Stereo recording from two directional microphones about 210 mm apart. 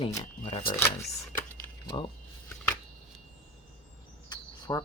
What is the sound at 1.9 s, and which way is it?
Speech, 25° left (ahead or behind).